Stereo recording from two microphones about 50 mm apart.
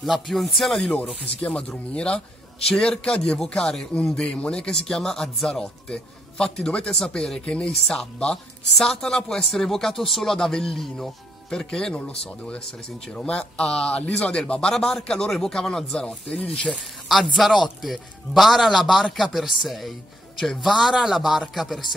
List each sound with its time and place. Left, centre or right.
0.0 s a man's voice: centre
1.4 s a man's voice: left; by 5.7 s centre
5.9 s speech: centre
9.4 s speech: centre
17.1 s a man's voice: centre
17.5 s speech: centre
17.8 s a man's voice: centre